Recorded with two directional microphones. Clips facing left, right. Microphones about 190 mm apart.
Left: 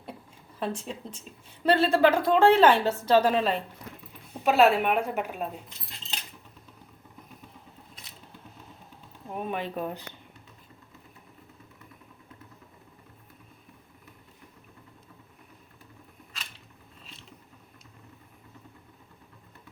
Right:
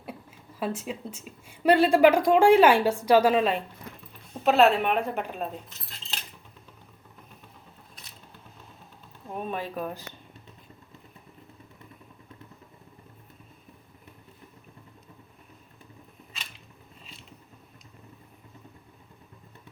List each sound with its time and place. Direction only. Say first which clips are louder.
0.6 s a woman's voice: right 2 dB; 5° right (ahead or behind)
4.4 s a woman's voice: right 1 dB; 10° left (ahead or behind)
9.3 s speech: even; 10° left (ahead or behind)